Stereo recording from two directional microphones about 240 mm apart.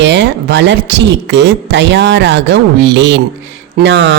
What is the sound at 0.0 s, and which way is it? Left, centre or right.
Speech, right.